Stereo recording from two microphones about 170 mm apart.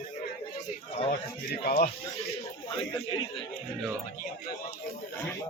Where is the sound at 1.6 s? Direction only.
65° left (ahead or behind).